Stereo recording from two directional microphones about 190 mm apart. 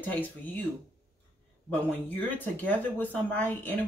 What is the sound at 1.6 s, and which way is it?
Speech, 10° left (ahead or behind).